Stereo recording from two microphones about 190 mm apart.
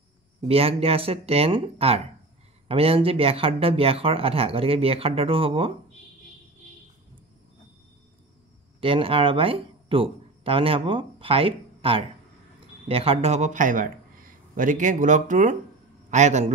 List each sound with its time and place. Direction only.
0.5 s speech: 30° right (ahead or behind)
8.8 s a man's voice: 30° right (ahead or behind)